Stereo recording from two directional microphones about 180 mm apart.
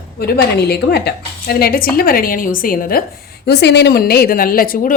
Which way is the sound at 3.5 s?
70° left (ahead or behind).